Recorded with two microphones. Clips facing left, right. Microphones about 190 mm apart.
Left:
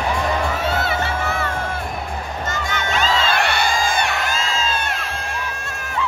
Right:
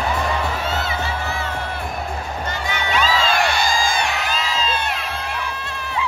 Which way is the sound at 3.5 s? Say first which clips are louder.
Even; 65° left (ahead or behind).